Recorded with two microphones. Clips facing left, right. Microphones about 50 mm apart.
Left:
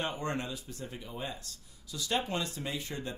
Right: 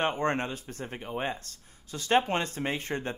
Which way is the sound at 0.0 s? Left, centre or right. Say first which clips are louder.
Right 7 dB; right.